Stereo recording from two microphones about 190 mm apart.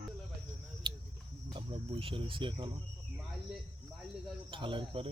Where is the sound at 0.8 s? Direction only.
25° right (ahead or behind).